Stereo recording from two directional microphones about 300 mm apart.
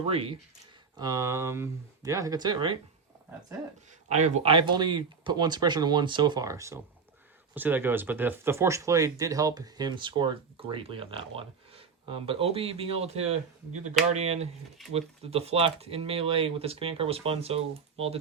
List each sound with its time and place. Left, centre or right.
0.1 s speech: centre
4.1 s speech: right